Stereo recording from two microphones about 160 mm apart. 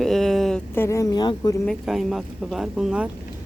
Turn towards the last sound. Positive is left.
turn(degrees=-5)  # may be behind; listen again after turning